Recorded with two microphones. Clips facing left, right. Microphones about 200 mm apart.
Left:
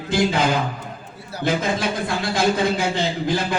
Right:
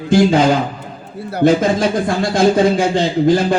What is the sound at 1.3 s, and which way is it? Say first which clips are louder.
A man's voice: right 9 dB; 55° right (ahead or behind).